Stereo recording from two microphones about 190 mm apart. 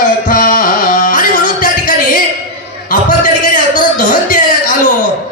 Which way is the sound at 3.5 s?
45° left (ahead or behind).